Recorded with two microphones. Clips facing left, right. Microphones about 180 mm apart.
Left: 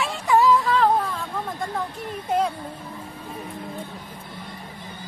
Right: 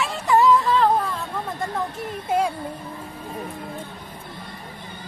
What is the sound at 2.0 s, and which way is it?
Speech, 10° right (ahead or behind).